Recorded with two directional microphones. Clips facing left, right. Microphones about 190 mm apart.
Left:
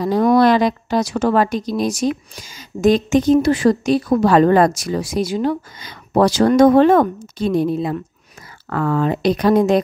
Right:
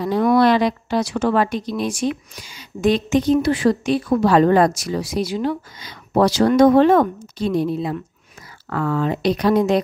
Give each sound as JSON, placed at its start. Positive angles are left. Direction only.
{"t": 0.0, "sound": "a woman's voice", "side_deg": 40}